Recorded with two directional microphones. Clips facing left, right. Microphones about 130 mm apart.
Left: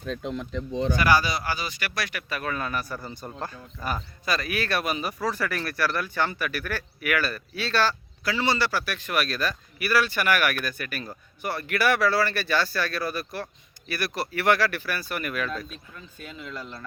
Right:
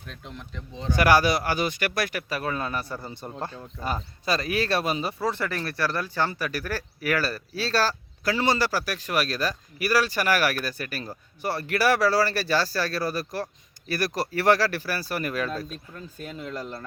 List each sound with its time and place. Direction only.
0.0 s speech: 80° left
0.9 s speech: 65° right (ahead or behind); by 2.2 s 50° right (ahead or behind)
2.3 s a man's voice: 30° right (ahead or behind)